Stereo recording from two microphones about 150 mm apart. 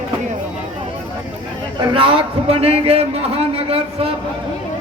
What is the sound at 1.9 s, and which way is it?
A man's voice, 35° right (ahead or behind).